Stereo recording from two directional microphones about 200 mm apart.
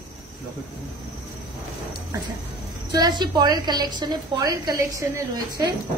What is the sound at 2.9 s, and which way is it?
A woman's voice, 20° right (ahead or behind).